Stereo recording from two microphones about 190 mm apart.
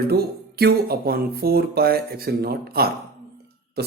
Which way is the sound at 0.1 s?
55° right (ahead or behind).